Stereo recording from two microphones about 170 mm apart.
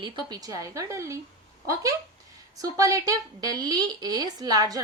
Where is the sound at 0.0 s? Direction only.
25° right (ahead or behind).